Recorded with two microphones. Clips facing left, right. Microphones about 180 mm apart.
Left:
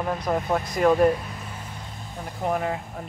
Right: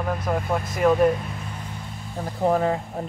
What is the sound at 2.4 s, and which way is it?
Speech, 30° right (ahead or behind).